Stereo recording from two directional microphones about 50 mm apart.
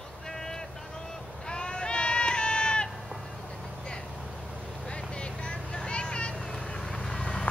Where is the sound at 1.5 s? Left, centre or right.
Centre.